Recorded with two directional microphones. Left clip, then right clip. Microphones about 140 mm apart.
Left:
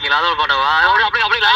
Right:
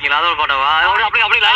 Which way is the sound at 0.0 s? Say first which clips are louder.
Right 1 dB; 45° right (ahead or behind).